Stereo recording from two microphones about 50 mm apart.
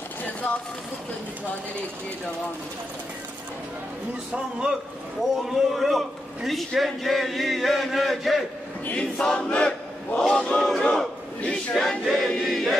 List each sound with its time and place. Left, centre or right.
0.2 s speech: left
4.3 s a man's voice: centre
5.5 s a man's voice: centre
8.9 s a sound: centre
10.6 s a sound: centre
11.7 s a man's voice: centre
12.1 s crowd: centre